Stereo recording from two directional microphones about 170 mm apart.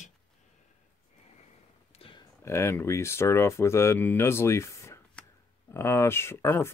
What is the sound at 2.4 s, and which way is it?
Speech, 15° left (ahead or behind).